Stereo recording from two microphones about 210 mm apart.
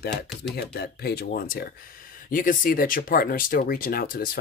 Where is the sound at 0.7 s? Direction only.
50° left (ahead or behind).